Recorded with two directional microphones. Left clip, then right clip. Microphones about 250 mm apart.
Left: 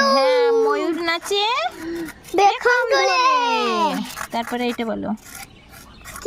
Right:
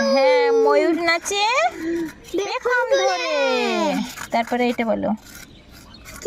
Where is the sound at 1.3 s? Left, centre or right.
Centre.